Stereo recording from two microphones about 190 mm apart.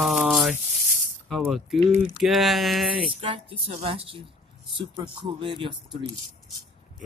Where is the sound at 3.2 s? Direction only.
30° right (ahead or behind).